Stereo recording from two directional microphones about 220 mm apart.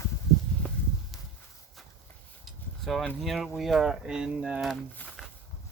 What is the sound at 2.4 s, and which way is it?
Speech, centre (ahead or behind).